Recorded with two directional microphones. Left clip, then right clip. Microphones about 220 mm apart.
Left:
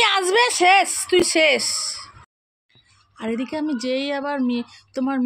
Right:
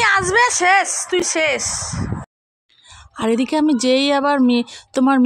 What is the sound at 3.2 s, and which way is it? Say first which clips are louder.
Speech: right 8 dB; 45° right (ahead or behind).